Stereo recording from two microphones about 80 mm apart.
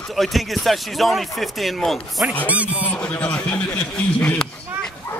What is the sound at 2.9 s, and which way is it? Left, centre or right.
Speech, centre.